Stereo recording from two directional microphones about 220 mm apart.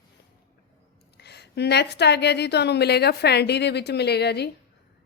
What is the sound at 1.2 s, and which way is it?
A woman's voice, 50° left (ahead or behind).